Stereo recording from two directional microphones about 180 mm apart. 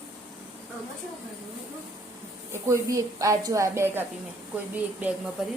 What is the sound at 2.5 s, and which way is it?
A woman's voice, 15° right (ahead or behind).